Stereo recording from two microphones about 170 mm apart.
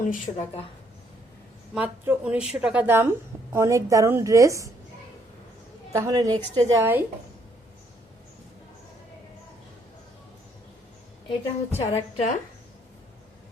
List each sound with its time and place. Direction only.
1.7 s a woman's voice: 10° right (ahead or behind)
5.9 s a woman's voice: 20° right (ahead or behind)
11.3 s a woman's voice: 40° left (ahead or behind)